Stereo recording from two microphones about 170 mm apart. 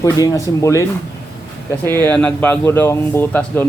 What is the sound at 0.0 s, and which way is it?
A man's voice, 20° left (ahead or behind).